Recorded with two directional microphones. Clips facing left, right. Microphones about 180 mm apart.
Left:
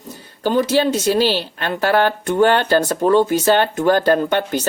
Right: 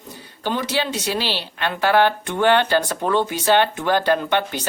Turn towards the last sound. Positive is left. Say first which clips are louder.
# left 4 dB
turn(degrees=45)  # may be behind; listen again after turning